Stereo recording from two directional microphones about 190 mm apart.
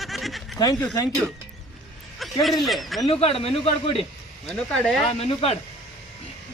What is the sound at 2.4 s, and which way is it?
Speech, centre (ahead or behind).